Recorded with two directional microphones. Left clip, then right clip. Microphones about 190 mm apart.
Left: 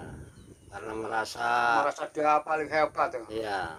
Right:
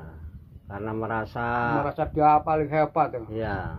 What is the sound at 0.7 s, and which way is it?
Speech, 35° left (ahead or behind).